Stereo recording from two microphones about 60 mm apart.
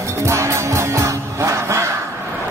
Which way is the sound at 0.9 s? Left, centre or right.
Right.